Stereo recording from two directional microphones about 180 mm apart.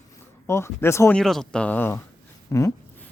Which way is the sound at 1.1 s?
5° left (ahead or behind).